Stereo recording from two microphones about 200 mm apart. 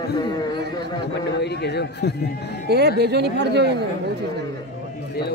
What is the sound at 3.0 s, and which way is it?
Speech, 55° right (ahead or behind).